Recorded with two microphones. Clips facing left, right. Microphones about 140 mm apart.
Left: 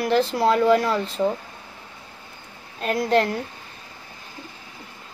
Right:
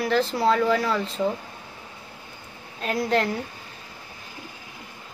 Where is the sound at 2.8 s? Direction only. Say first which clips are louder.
Left 3 dB; centre (ahead or behind).